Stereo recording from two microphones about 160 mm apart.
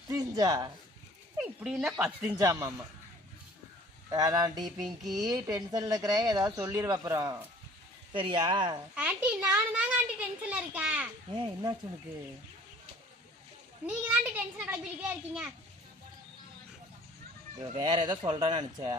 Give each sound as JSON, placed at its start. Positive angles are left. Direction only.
{"t": 0.1, "sound": "speech", "side_deg": -20}
{"t": 1.4, "sound": "speech", "side_deg": -10}
{"t": 2.4, "sound": "speech", "side_deg": -20}
{"t": 4.1, "sound": "speech", "side_deg": -25}
{"t": 4.8, "sound": "speech", "side_deg": 0}
{"t": 5.2, "sound": "speech", "side_deg": -25}
{"t": 8.1, "sound": "speech", "side_deg": -30}
{"t": 9.0, "sound": "a child's voice", "side_deg": -10}
{"t": 11.3, "sound": "speech", "side_deg": -30}
{"t": 13.8, "sound": "a child's voice", "side_deg": -10}
{"t": 17.7, "sound": "speech", "side_deg": -30}